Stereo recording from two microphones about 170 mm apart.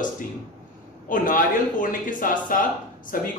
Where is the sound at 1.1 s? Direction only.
55° left (ahead or behind).